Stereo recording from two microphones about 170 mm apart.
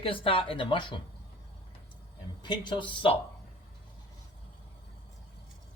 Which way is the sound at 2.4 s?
25° left (ahead or behind).